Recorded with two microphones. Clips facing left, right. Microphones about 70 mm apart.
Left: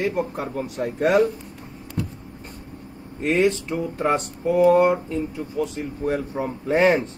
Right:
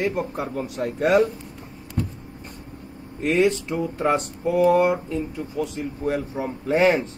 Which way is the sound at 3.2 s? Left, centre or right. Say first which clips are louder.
Even; centre.